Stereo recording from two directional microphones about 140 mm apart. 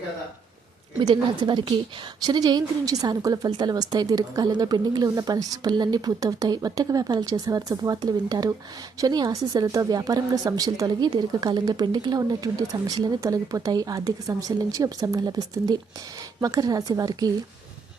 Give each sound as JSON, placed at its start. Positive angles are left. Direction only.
{"t": 1.0, "sound": "a woman's voice", "side_deg": -35}